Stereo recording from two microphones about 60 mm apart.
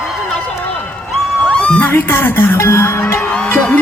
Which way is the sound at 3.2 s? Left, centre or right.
Left.